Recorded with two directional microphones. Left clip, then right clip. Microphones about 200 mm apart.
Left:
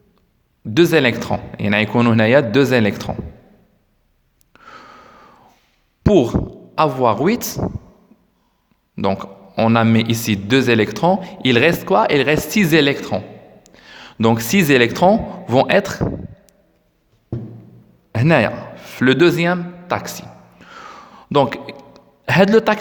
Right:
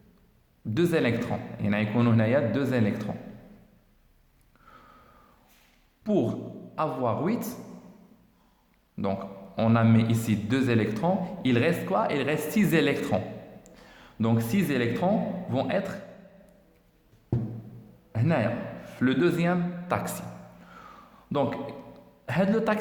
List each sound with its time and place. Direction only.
0.7 s a man's voice: 40° left (ahead or behind)
4.5 s gasp: 45° left (ahead or behind)
6.0 s a man's voice: 45° left (ahead or behind)
9.0 s a man's voice: 40° left (ahead or behind); by 13.2 s 25° left (ahead or behind)
13.8 s a man's voice: 40° left (ahead or behind)
18.1 s a man's voice: 50° left (ahead or behind)
19.9 s a sound: 25° left (ahead or behind)